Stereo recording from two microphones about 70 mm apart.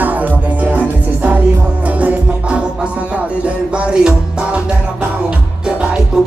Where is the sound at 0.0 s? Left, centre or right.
Right.